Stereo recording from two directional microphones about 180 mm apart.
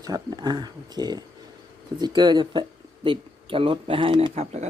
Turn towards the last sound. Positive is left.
turn(degrees=-35)  # may be behind; listen again after turning